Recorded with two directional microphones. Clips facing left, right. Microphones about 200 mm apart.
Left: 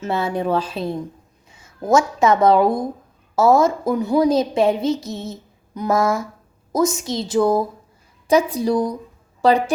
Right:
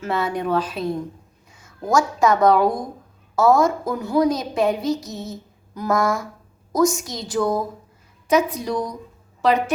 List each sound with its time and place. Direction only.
0.0 s a woman's voice: 25° left (ahead or behind)